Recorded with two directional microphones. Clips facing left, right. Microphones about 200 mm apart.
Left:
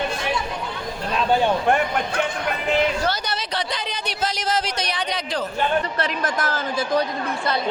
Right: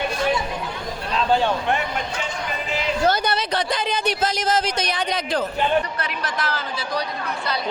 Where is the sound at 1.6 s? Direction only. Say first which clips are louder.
Left 4 dB; 55° left (ahead or behind).